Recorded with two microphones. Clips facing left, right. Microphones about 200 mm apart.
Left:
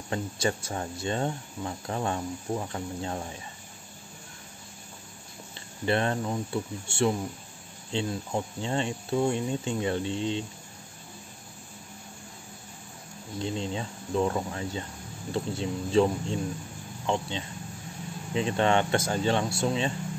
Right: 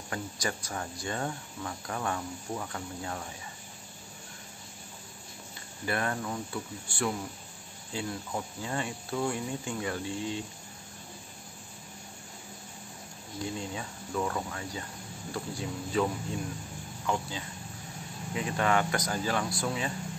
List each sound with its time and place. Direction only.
0.1 s speech: 25° left (ahead or behind)
5.9 s speech: 25° left (ahead or behind)
13.4 s speech: 25° left (ahead or behind)